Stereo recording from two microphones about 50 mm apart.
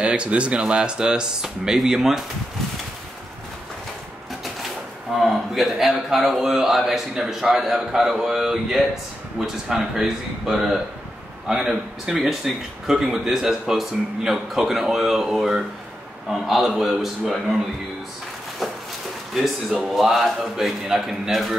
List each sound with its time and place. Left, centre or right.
0.0 s a man's voice: right
5.1 s a man's voice: centre
19.4 s a man's voice: centre